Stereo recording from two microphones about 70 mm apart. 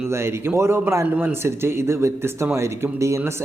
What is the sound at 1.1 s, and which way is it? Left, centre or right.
Speech, right.